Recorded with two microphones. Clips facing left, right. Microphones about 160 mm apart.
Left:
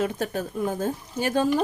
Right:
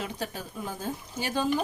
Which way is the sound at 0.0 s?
50° left (ahead or behind).